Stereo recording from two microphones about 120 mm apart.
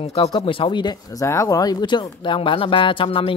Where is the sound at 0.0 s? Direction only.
55° left (ahead or behind); by 1.2 s 40° left (ahead or behind).